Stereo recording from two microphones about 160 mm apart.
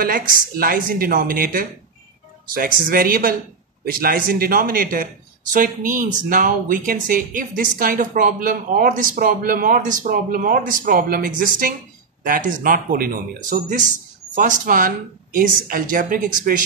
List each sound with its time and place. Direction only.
0.0 s speech: 60° right (ahead or behind)
5.5 s speech: 55° right (ahead or behind)